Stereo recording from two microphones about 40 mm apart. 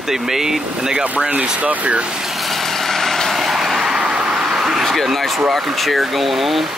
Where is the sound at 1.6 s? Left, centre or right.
Right.